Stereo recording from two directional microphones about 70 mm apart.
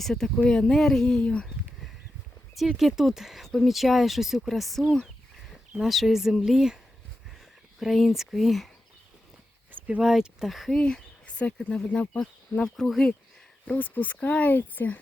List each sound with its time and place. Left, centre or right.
0.0 s speech: centre
2.6 s speech: centre
7.8 s speech: centre
9.8 s speech: centre
12.6 s speech: centre
13.7 s speech: left